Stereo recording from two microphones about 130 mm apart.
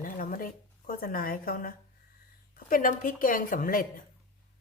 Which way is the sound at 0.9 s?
90° left.